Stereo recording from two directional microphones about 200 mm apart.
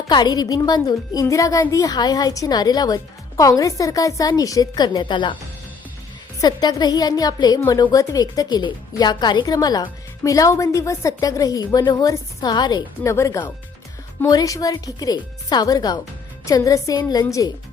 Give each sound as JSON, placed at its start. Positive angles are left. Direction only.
{"t": 0.1, "sound": "a woman's voice", "side_deg": 20}
{"t": 6.4, "sound": "a woman's voice", "side_deg": 20}